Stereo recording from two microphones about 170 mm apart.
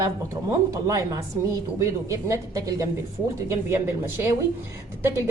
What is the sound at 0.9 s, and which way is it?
A woman's voice, 20° right (ahead or behind).